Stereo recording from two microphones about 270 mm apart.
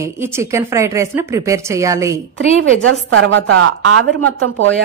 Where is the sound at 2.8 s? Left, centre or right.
Right.